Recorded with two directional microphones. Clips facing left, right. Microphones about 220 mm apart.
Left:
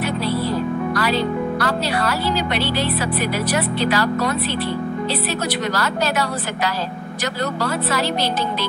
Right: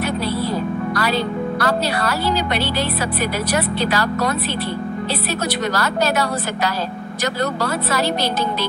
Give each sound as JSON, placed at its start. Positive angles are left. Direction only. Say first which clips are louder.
{"t": 1.6, "sound": "speech", "louder": "right 1 dB", "side_deg": -40}